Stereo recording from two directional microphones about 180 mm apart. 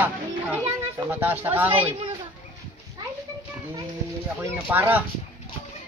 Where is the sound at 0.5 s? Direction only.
10° right (ahead or behind).